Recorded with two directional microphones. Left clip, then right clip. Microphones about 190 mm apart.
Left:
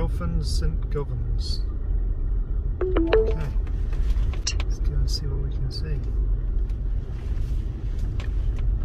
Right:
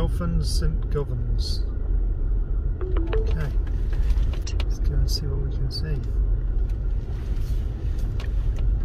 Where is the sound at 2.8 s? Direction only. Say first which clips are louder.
Left 10 dB; 5° left (ahead or behind).